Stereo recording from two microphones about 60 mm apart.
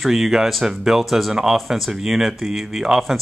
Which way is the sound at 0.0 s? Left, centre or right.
Centre.